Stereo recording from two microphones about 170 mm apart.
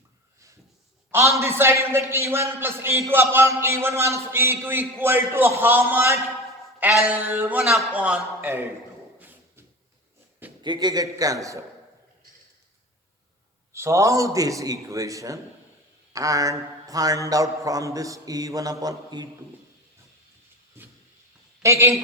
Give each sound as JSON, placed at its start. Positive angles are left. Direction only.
{"t": 1.1, "sound": "a man's voice", "side_deg": -15}
{"t": 9.1, "sound": "a sound", "side_deg": -10}
{"t": 10.6, "sound": "mantra", "side_deg": -25}
{"t": 13.7, "sound": "mantra", "side_deg": -15}
{"t": 21.6, "sound": "a man's voice", "side_deg": -15}